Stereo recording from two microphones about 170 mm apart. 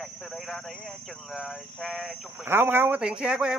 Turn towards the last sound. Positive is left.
turn(degrees=-5)  # may be behind; listen again after turning